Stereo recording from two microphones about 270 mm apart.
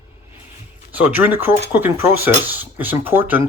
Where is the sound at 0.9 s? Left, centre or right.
Centre.